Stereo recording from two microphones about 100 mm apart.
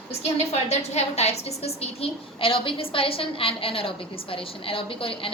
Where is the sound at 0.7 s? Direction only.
90° left.